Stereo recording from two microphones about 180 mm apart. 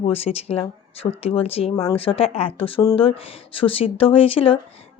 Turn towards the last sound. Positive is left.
turn(degrees=30)  # may be behind; listen again after turning